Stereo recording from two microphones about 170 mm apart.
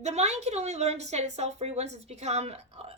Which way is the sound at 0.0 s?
40° right (ahead or behind).